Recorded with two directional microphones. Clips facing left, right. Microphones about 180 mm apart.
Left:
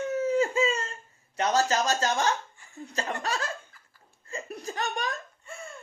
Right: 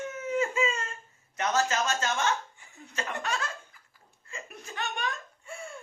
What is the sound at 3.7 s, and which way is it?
Laughter, 15° right (ahead or behind).